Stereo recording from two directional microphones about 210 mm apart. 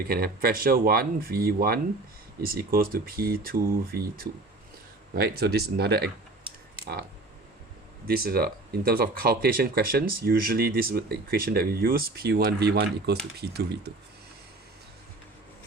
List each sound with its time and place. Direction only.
0.0 s speech: 45° right (ahead or behind)
5.4 s speech: 50° right (ahead or behind)
8.0 s speech: 45° right (ahead or behind)